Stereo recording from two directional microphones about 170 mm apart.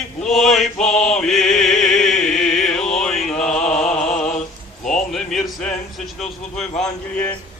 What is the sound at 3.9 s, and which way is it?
Mantra, 40° left (ahead or behind).